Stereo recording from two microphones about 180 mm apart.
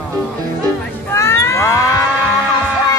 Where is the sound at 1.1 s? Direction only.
15° left (ahead or behind).